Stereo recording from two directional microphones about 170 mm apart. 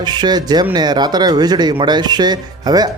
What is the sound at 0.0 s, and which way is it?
Speech, 25° right (ahead or behind).